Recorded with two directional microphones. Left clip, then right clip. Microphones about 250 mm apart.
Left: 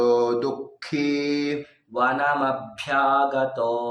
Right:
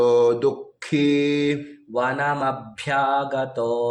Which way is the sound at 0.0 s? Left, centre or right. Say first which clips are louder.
Right 3 dB; right.